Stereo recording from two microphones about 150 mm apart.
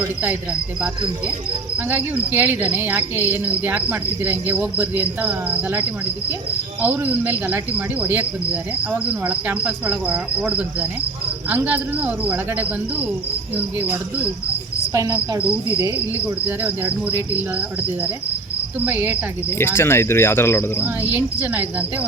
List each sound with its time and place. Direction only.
1.9 s cricket: 10° right (ahead or behind)
6.8 s cricket: 10° right (ahead or behind)
14.9 s cricket: 20° right (ahead or behind)
15.4 s cricket: 10° right (ahead or behind)
18.8 s cricket: 10° right (ahead or behind)
19.5 s cricket: 15° left (ahead or behind)
20.8 s cricket: 10° right (ahead or behind)